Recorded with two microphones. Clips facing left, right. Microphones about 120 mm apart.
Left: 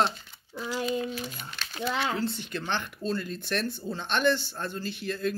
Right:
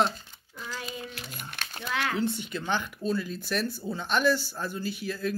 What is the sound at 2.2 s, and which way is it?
Speech, 15° right (ahead or behind).